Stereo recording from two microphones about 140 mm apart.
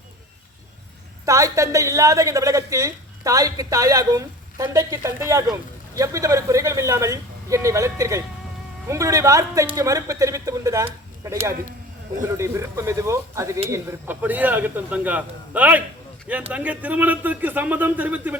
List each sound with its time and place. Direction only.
1.2 s a woman's voice: 25° right (ahead or behind)
12.2 s a woman's voice: 20° right (ahead or behind)